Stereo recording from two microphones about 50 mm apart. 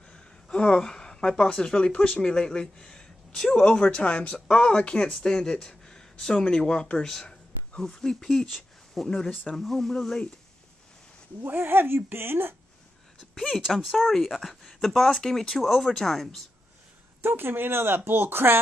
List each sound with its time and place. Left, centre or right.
0.1 s a woman's voice: centre
9.0 s speech: centre
11.4 s speech: right
13.7 s speech: centre
17.2 s speech: right